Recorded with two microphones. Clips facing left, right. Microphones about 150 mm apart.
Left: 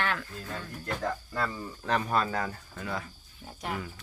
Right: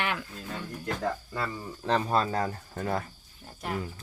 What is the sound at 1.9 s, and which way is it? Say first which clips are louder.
Speech: right 2 dB; 30° right (ahead or behind).